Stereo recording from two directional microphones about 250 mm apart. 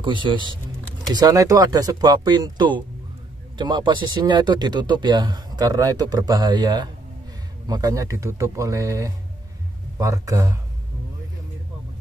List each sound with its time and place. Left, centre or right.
0.0 s speech: centre